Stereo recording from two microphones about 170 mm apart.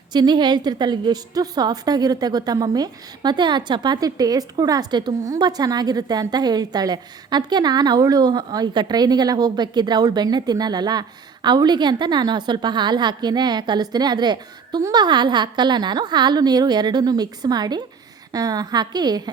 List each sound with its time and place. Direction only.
0.1 s a woman's voice: 25° right (ahead or behind)